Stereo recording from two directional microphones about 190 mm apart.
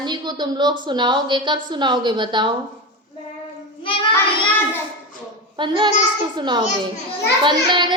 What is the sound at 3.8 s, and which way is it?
Child singing, 25° left (ahead or behind).